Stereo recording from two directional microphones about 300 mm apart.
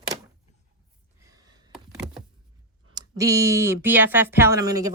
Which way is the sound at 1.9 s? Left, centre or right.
Centre.